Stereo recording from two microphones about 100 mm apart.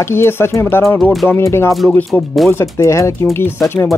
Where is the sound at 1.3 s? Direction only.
25° left (ahead or behind).